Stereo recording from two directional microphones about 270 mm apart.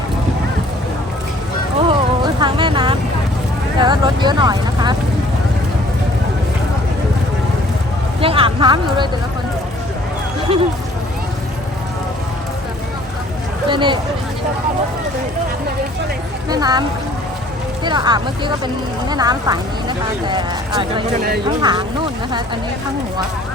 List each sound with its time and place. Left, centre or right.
1.9 s music: centre
3.8 s speech: centre
8.2 s speech: centre
10.5 s speech: right
13.7 s speech: centre
16.5 s speech: centre
17.8 s speech: centre